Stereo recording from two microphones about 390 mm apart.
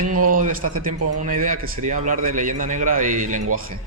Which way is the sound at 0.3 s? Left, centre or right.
Right.